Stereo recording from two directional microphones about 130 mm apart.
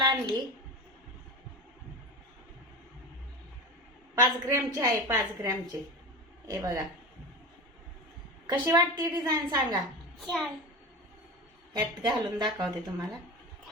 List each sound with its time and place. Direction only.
0.0 s a woman's voice: 35° right (ahead or behind)
4.1 s a woman's voice: 25° right (ahead or behind)
8.7 s a woman's voice: 30° right (ahead or behind)
10.2 s a child's voice: centre (ahead or behind)
11.7 s a woman's voice: 35° right (ahead or behind)